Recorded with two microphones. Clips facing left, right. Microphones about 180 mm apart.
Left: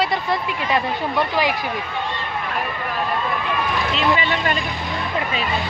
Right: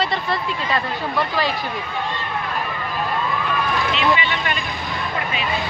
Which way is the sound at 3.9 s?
40° left (ahead or behind).